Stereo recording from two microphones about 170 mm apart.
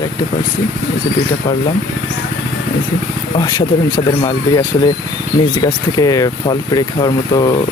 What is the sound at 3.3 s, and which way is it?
Speech, 25° left (ahead or behind).